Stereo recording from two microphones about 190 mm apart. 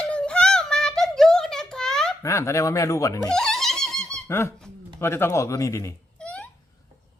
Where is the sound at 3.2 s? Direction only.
5° left (ahead or behind).